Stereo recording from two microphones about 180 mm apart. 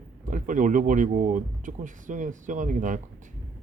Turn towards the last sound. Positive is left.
turn(degrees=-45)  # may be behind; listen again after turning